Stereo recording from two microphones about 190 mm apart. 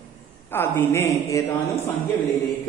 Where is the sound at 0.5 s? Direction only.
10° left (ahead or behind).